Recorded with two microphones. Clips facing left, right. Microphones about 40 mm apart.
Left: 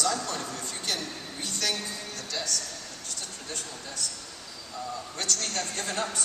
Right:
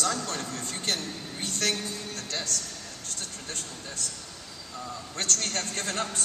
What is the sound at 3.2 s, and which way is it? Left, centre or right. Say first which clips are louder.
Speech: even; right.